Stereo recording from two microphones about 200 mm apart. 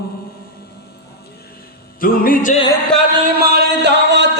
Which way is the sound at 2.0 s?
45° left (ahead or behind).